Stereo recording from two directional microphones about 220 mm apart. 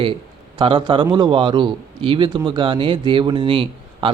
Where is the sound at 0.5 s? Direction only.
20° right (ahead or behind).